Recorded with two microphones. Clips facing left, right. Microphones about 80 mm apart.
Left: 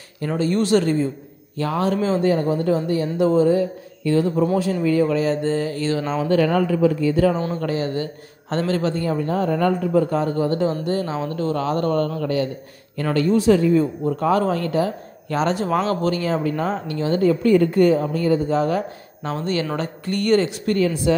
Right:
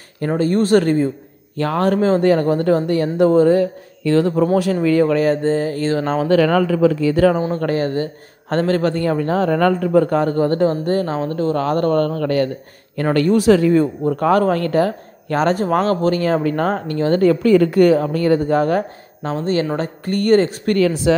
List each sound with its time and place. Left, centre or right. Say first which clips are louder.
0.2 s a man's voice: right 4 dB; right
2.2 s speech: right 4 dB; right
4.8 s speech: right 4 dB; right
6.2 s speech: right 3 dB; right
7.5 s a man's voice: right 4 dB; right
11.6 s a man's voice: right 4 dB; right
14.1 s a man's voice: right 4 dB; right
17.2 s a woman's voice: right 2 dB; right
19.2 s speech: right 4 dB; right
20.6 s a woman's voice: right 4 dB; right